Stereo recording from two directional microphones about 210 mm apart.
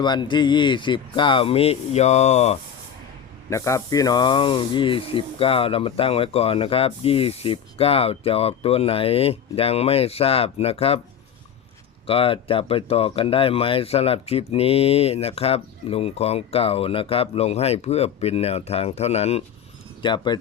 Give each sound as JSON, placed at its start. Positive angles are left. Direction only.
{"t": 0.0, "sound": "speech", "side_deg": 20}
{"t": 3.5, "sound": "speech", "side_deg": 15}
{"t": 12.0, "sound": "speech", "side_deg": 25}